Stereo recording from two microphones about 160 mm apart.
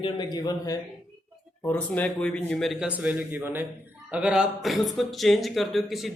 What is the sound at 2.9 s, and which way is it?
Speech, 10° right (ahead or behind).